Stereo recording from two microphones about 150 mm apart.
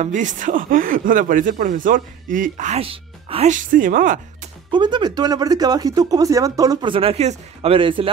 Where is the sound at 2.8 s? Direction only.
40° right (ahead or behind).